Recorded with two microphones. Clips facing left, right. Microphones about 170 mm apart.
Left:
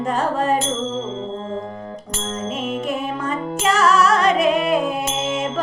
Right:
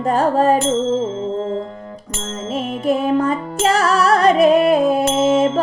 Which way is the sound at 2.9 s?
35° right (ahead or behind).